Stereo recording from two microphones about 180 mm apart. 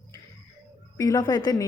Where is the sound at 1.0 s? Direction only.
20° left (ahead or behind).